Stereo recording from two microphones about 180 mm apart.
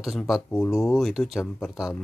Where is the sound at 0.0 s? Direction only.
Centre (ahead or behind).